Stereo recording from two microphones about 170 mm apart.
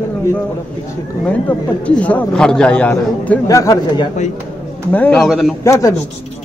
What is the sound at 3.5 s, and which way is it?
Speech, 20° left (ahead or behind).